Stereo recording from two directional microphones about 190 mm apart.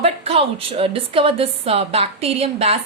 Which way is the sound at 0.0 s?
30° right (ahead or behind).